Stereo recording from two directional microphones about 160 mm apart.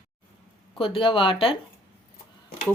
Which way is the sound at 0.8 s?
35° left (ahead or behind).